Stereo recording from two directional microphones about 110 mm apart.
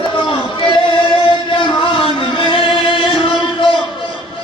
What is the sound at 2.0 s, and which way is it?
Music, 50° left (ahead or behind).